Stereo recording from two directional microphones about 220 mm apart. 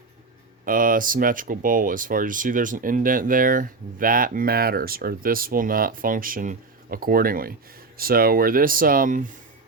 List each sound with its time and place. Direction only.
0.6 s speech: 40° right (ahead or behind)